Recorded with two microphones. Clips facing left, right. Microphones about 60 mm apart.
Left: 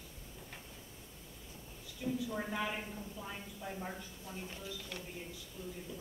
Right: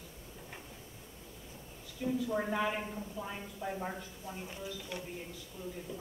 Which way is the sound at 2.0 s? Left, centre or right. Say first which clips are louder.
Right 3 dB; centre.